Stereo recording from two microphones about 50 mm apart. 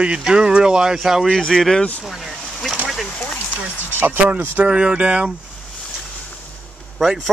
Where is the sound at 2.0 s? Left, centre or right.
Centre.